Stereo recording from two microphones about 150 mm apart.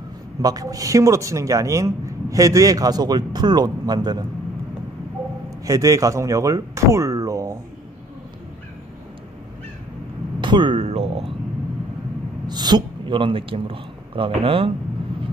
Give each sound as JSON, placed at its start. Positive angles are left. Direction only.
{"t": 0.4, "sound": "a man's voice", "side_deg": -25}
{"t": 5.7, "sound": "speech", "side_deg": -20}
{"t": 10.4, "sound": "a sound", "side_deg": -30}
{"t": 12.4, "sound": "speech", "side_deg": -30}